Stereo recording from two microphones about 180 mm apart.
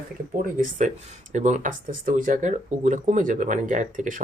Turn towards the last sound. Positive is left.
turn(degrees=-45)  # may be behind; listen again after turning